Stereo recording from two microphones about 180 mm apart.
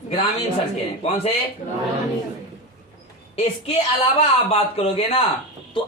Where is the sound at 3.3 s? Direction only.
35° left (ahead or behind).